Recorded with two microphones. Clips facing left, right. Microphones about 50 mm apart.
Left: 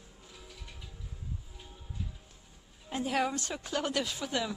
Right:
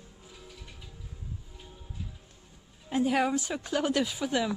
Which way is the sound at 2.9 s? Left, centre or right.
Centre.